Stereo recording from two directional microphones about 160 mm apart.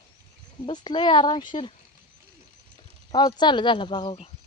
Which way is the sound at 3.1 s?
25° left (ahead or behind).